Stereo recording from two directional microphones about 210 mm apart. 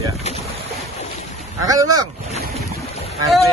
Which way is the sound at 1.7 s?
15° right (ahead or behind).